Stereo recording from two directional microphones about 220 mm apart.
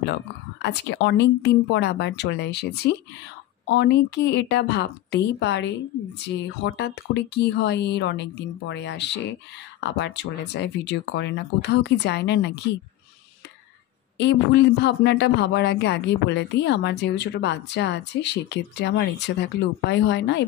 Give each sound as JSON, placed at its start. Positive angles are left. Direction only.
{"t": 0.6, "sound": "a man's voice", "side_deg": 55}
{"t": 14.1, "sound": "a man's voice", "side_deg": 50}